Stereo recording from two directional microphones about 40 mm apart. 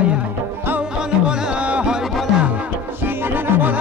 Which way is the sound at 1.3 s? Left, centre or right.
Right.